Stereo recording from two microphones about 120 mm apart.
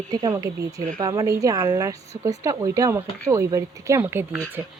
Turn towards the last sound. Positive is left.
turn(degrees=-20)  # may be behind; listen again after turning